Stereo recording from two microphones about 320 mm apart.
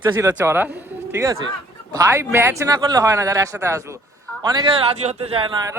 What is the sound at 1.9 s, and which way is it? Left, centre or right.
Speech, centre.